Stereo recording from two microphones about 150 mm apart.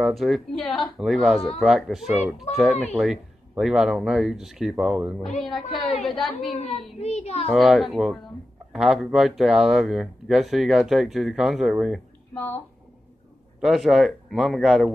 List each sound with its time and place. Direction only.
0.0 s speech: centre (ahead or behind)
6.6 s a child's voice: 45° left (ahead or behind)
7.5 s speech: centre (ahead or behind)
12.4 s speech: 15° left (ahead or behind)
13.6 s speech: centre (ahead or behind)